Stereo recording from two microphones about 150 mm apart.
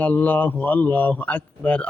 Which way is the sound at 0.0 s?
10° left (ahead or behind).